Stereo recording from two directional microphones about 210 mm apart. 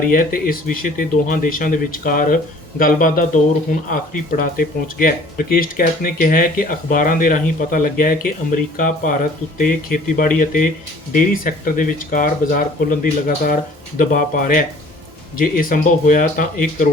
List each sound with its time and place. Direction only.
0.1 s speech: 45° left (ahead or behind)